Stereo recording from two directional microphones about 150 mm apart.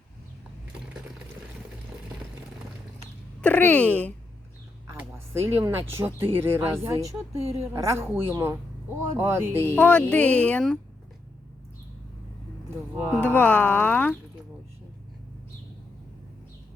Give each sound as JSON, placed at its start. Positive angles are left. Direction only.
{"t": 3.4, "sound": "speech", "side_deg": 10}
{"t": 4.9, "sound": "a woman's voice", "side_deg": -15}
{"t": 9.7, "sound": "speech", "side_deg": 10}
{"t": 13.0, "sound": "a woman's voice", "side_deg": -10}
{"t": 13.2, "sound": "speech", "side_deg": 10}